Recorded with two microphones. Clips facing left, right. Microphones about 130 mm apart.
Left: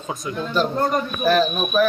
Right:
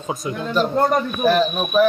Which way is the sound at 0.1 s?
10° right (ahead or behind).